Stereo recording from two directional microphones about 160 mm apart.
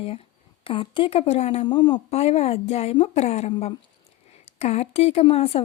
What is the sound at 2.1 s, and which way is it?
A woman's voice, 40° left (ahead or behind).